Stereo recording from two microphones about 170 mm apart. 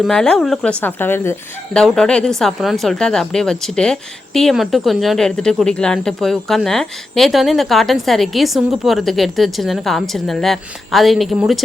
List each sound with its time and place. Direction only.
0.0 s a woman's voice: 5° left (ahead or behind)
1.7 s a woman's voice: 5° left (ahead or behind)